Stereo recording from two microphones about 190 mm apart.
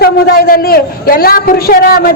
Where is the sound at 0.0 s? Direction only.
50° left (ahead or behind).